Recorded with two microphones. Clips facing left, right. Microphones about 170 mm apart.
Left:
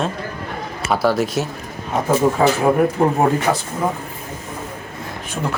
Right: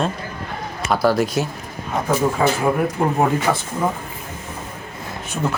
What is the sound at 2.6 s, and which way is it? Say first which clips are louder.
Speech: left 4 dB; 15° left (ahead or behind).